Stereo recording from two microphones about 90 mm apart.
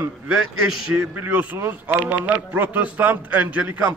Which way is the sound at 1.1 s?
20° right (ahead or behind).